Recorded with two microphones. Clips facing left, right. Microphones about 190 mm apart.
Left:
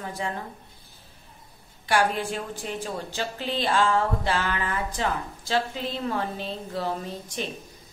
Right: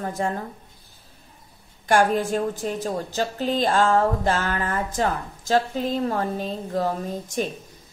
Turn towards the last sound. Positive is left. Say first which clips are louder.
# right 6 dB
turn(degrees=-45)  # may be behind; listen again after turning